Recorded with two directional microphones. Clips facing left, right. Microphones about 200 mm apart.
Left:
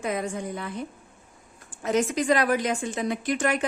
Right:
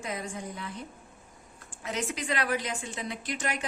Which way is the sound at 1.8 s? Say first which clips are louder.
Left 10 dB; 45° left (ahead or behind).